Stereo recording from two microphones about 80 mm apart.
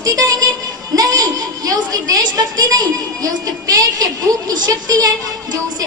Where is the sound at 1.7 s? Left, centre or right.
Right.